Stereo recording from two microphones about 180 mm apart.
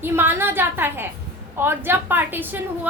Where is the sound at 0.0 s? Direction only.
10° right (ahead or behind).